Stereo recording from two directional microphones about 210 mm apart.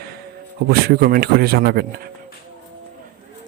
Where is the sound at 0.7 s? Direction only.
50° right (ahead or behind).